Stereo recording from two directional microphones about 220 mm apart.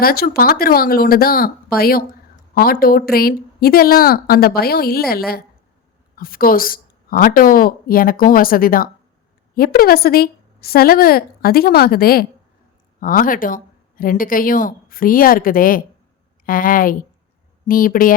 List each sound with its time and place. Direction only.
0.0 s a woman's voice: 45° left (ahead or behind)